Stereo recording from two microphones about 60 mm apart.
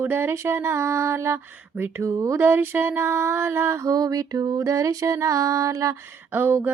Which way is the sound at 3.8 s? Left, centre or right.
Right.